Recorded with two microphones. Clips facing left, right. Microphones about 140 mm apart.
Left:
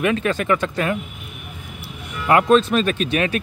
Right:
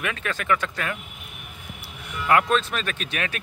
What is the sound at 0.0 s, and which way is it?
Speech, 25° left (ahead or behind).